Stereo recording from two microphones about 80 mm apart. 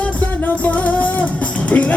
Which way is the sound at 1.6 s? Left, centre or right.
Centre.